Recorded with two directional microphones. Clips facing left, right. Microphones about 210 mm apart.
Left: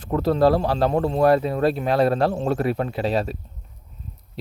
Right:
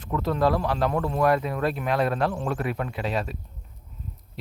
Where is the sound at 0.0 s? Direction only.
35° left (ahead or behind).